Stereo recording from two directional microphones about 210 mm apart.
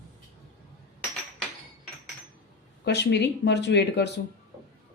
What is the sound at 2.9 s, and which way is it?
Speech, 55° left (ahead or behind).